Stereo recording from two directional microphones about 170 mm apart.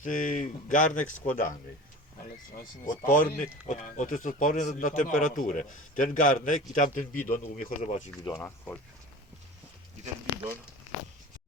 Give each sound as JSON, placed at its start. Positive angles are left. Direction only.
{"t": 0.0, "sound": "a man's voice", "side_deg": 50}
{"t": 2.8, "sound": "a man's voice", "side_deg": 50}
{"t": 8.2, "sound": "speech", "side_deg": 20}